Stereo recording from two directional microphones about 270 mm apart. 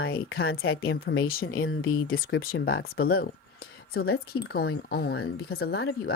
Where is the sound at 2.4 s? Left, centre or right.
Left.